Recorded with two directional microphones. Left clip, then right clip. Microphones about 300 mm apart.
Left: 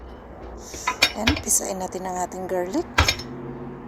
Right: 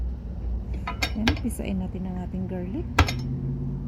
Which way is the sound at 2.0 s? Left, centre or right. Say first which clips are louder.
Left 12 dB; centre.